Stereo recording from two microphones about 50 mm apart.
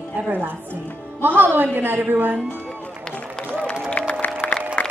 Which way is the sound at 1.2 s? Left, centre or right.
Right.